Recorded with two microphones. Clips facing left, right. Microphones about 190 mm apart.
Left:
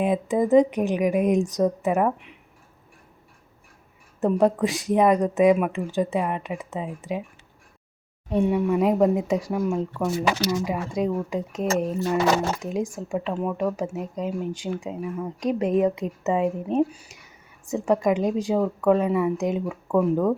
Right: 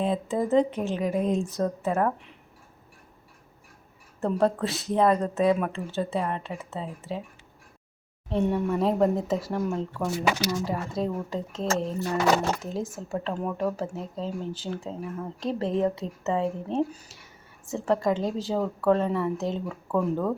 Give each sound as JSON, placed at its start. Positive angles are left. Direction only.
{"t": 0.0, "sound": "speech", "side_deg": 15}
{"t": 4.2, "sound": "speech", "side_deg": 15}
{"t": 8.3, "sound": "speech", "side_deg": 10}